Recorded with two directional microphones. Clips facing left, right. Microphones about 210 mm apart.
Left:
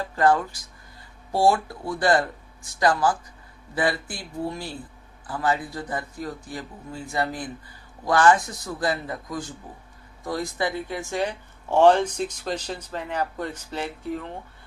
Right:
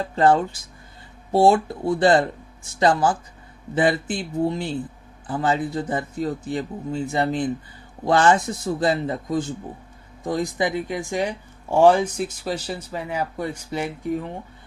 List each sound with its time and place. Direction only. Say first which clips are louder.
0.0 s speech: right 3 dB; 25° right (ahead or behind)